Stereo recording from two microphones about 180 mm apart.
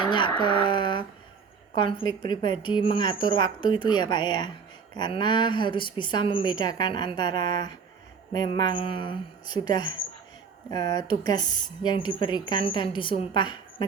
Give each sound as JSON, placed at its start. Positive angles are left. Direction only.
{"t": 0.0, "sound": "speech", "side_deg": 25}